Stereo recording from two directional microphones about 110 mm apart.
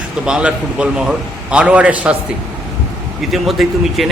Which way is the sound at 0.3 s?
10° right (ahead or behind).